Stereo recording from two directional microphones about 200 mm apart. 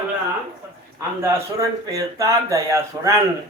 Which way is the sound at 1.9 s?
15° right (ahead or behind).